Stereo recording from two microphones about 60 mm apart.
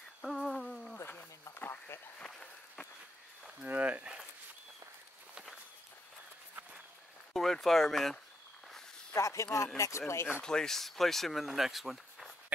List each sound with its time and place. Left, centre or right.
0.2 s hoot: centre
0.9 s a sound: left
1.6 s insect: left
2.1 s walk: centre
3.6 s speech: right
4.0 s a sound: centre
7.3 s speech: centre
9.1 s speech: left
10.4 s speech: centre